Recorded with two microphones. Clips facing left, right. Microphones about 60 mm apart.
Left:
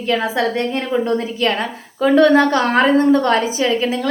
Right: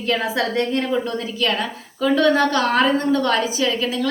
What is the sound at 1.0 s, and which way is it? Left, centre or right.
A woman's voice, left.